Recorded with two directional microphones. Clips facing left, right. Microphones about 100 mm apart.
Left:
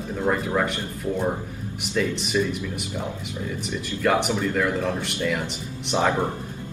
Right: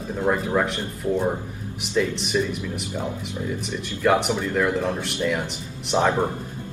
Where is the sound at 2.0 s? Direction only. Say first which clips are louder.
Right 1 dB; 5° right (ahead or behind).